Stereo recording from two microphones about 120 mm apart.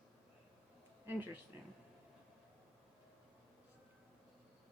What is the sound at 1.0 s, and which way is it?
Speech, 15° right (ahead or behind).